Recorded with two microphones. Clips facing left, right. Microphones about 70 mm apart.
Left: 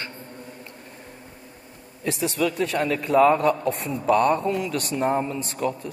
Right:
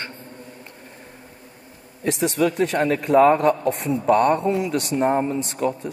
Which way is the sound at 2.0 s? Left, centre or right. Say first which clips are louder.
Right 4 dB; right.